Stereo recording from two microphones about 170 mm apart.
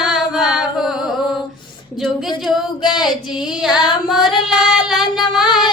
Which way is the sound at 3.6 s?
5° right (ahead or behind).